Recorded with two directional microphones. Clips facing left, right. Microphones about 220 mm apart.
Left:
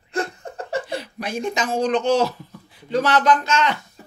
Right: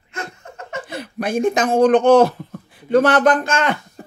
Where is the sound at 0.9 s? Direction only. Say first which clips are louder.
Right 6 dB; 55° right (ahead or behind).